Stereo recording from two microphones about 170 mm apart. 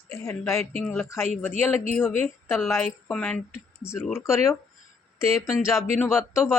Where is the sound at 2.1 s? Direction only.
15° left (ahead or behind).